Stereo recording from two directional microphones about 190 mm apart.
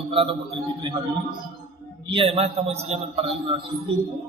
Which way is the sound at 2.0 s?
25° right (ahead or behind).